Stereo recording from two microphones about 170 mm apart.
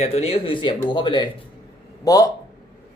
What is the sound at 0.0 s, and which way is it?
Speech, 35° left (ahead or behind).